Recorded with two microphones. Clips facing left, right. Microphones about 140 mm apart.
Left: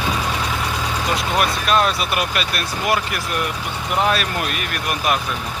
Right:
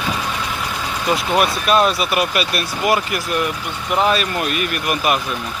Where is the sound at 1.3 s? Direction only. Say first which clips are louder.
Right 2 dB; 5° right (ahead or behind).